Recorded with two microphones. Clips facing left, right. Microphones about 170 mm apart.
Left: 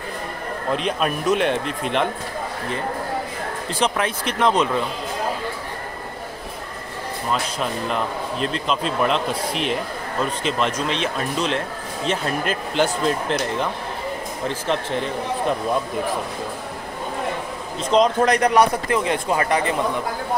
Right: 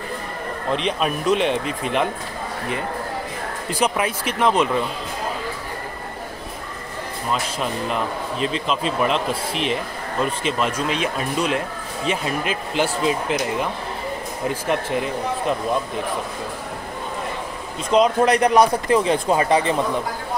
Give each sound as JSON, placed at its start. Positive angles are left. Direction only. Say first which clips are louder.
{"t": 0.7, "sound": "speech", "louder": "even", "side_deg": 0}
{"t": 3.8, "sound": "speech", "louder": "right 1 dB", "side_deg": -5}
{"t": 7.6, "sound": "speech", "louder": "even", "side_deg": 0}
{"t": 14.5, "sound": "speech", "louder": "right 2 dB", "side_deg": -10}
{"t": 17.8, "sound": "speech", "louder": "right 1 dB", "side_deg": -10}
{"t": 18.3, "sound": "speech", "louder": "right 1 dB", "side_deg": -30}